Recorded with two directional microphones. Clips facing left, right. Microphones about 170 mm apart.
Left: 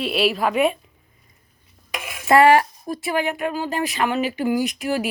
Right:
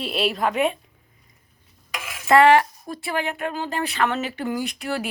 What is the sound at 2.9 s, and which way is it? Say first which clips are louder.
Speech: left 4 dB; 15° left (ahead or behind).